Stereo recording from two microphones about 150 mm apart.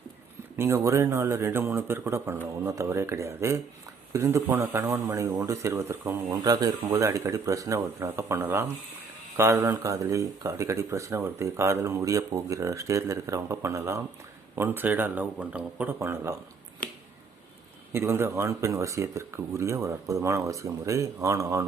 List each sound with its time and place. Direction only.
0.5 s a man's voice: 20° right (ahead or behind)
17.9 s a man's voice: 15° right (ahead or behind)